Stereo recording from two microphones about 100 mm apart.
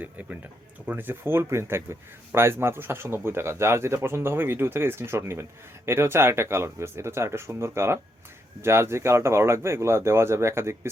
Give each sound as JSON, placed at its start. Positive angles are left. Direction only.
{"t": 0.0, "sound": "speech", "side_deg": -15}